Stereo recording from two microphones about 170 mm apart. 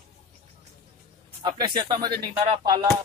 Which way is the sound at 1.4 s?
25° right (ahead or behind).